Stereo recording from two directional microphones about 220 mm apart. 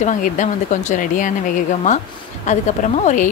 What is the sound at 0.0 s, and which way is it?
Speech, 35° left (ahead or behind).